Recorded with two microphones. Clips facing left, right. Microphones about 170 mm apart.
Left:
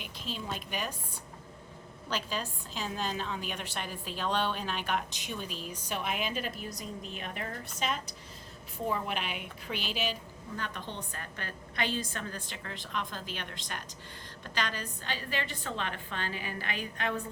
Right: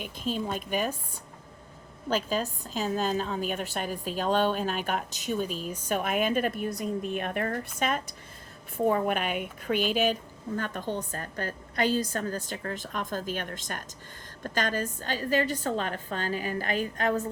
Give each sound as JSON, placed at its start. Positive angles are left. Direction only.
{"t": 0.0, "sound": "a woman's voice", "side_deg": -50}
{"t": 2.0, "sound": "a woman's voice", "side_deg": -45}